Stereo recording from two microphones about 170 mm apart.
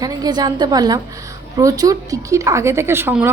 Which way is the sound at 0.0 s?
25° right (ahead or behind).